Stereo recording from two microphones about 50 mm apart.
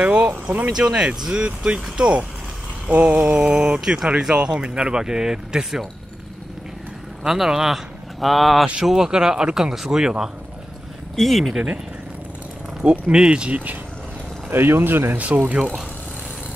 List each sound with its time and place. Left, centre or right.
0.0 s speech: right
0.7 s speech: centre
7.2 s speech: centre
8.8 s speech: centre
11.1 s speech: centre
13.1 s speech: centre
14.5 s speech: right
15.1 s speech: right